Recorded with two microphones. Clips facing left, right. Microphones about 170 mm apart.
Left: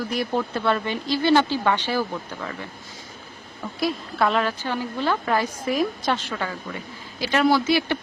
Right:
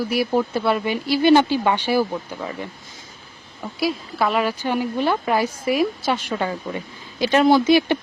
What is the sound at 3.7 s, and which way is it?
Speech, 5° right (ahead or behind).